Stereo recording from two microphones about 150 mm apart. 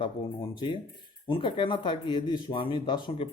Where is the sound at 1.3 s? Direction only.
35° left (ahead or behind).